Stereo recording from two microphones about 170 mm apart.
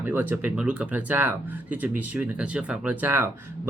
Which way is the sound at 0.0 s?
10° right (ahead or behind).